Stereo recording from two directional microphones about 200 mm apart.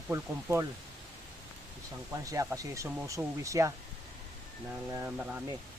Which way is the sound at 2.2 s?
15° right (ahead or behind).